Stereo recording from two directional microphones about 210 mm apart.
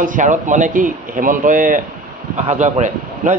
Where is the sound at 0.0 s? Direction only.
40° right (ahead or behind).